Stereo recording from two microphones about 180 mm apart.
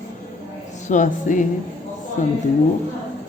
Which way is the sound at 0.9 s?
45° left (ahead or behind).